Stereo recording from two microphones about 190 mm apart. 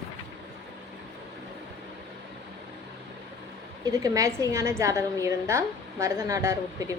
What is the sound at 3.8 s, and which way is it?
A woman's voice, 20° right (ahead or behind).